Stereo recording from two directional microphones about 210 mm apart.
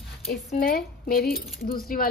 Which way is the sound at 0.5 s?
45° left (ahead or behind).